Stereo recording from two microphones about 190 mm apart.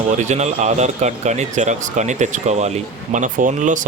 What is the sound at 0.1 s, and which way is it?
Speech, 40° right (ahead or behind).